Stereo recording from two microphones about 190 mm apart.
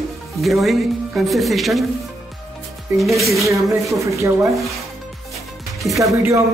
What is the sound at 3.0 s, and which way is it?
Speech, centre (ahead or behind).